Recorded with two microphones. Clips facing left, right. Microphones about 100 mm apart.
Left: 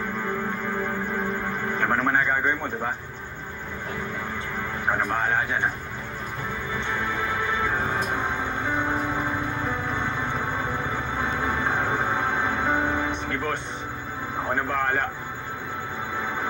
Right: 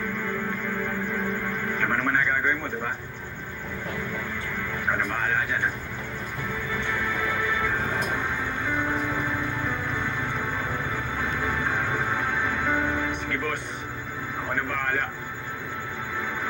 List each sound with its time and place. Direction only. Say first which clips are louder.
0.7 s music: left 1 dB; 30° left (ahead or behind)
1.8 s radio: left 2 dB; 30° left (ahead or behind)
6.8 s music: left 1 dB; 30° left (ahead or behind)
14.5 s speech: left 3 dB; 30° left (ahead or behind)